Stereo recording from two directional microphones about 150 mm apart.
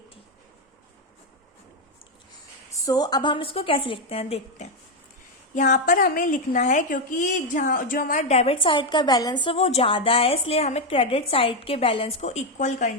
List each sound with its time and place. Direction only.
2.8 s a woman's voice: 25° left (ahead or behind); by 4.7 s 45° left (ahead or behind)
5.5 s a woman's voice: 55° left (ahead or behind); by 9.6 s 30° left (ahead or behind)
9.6 s a woman's voice: 45° left (ahead or behind)